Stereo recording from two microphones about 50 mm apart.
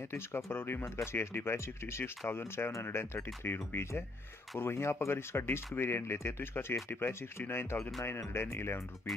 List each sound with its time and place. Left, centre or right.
0.5 s speech: left
0.8 s speech: left